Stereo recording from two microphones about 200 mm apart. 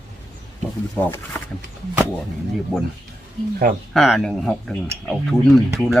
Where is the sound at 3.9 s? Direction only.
Centre (ahead or behind).